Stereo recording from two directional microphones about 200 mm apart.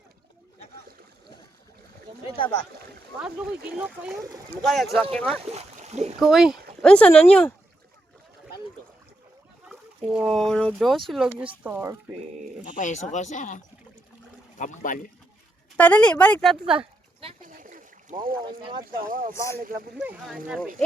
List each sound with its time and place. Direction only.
3.2 s speech: 5° right (ahead or behind)
5.3 s speech: 30° right (ahead or behind)
6.1 s speech: centre (ahead or behind)
9.6 s speech: 5° right (ahead or behind)
12.6 s speech: 40° left (ahead or behind)
14.6 s speech: 40° left (ahead or behind)
15.8 s speech: 5° left (ahead or behind)
16.6 s a sound: 30° right (ahead or behind)
17.4 s boat: 40° right (ahead or behind)
18.8 s speech: 45° right (ahead or behind)
19.3 s speech: 15° left (ahead or behind)
20.0 s speech: 5° right (ahead or behind)